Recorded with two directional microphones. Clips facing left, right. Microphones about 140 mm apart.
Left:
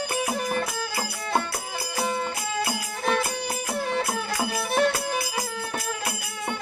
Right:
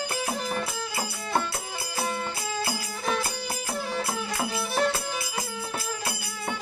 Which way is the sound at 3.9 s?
60° left (ahead or behind).